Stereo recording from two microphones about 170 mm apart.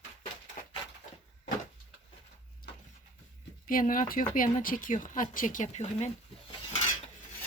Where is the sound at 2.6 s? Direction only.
60° left (ahead or behind).